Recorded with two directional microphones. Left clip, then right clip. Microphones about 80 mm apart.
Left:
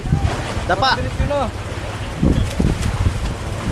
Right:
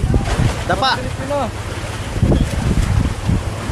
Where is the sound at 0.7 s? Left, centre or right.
Centre.